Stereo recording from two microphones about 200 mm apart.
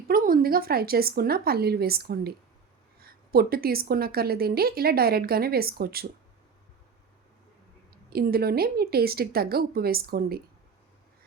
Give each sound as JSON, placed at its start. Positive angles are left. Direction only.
{"t": 0.1, "sound": "a woman's voice", "side_deg": -45}
{"t": 8.1, "sound": "a woman's voice", "side_deg": -50}